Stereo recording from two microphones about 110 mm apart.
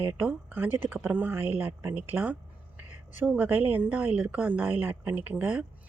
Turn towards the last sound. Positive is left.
turn(degrees=-15)  # may be behind; listen again after turning